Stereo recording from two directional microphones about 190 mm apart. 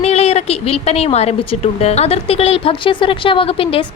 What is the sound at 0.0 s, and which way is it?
A woman's voice, 35° left (ahead or behind).